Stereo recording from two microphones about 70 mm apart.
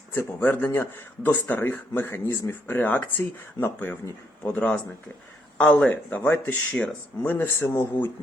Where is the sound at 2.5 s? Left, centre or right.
Left.